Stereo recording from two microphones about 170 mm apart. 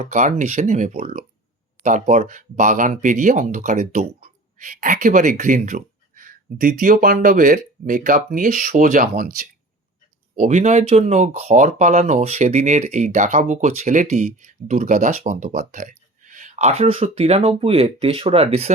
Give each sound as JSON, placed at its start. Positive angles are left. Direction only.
{"t": 0.0, "sound": "speech", "side_deg": -45}
{"t": 10.3, "sound": "speech", "side_deg": -45}